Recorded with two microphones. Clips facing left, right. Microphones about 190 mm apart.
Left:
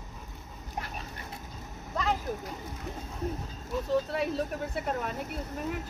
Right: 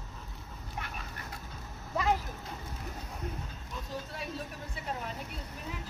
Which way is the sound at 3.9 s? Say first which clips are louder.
Left 11 dB; 65° left (ahead or behind).